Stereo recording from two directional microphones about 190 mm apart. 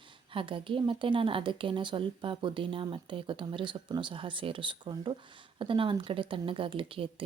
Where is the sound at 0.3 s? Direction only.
25° right (ahead or behind).